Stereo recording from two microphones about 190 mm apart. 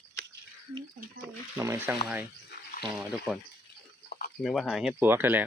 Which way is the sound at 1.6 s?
15° right (ahead or behind).